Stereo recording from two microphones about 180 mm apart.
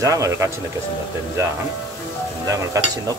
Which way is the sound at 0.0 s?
15° right (ahead or behind).